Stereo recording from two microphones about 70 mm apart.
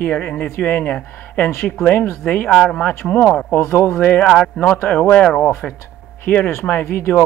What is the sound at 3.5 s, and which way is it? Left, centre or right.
Speech, left.